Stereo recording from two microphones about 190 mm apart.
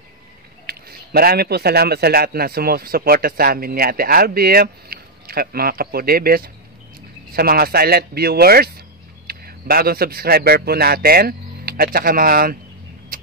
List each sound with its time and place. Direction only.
0.7 s a man's voice: 55° right (ahead or behind)
13.1 s vehicle: 45° right (ahead or behind)